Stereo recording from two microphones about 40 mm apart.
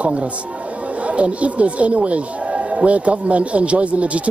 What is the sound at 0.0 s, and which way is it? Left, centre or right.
Speech, right.